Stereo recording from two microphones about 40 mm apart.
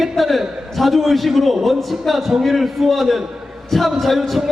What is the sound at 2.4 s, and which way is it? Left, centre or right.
A man's voice, centre.